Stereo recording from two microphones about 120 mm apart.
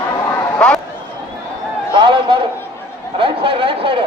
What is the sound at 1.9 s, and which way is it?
A man's voice, 45° right (ahead or behind).